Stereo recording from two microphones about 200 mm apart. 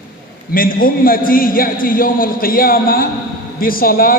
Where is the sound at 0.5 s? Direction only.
45° left (ahead or behind).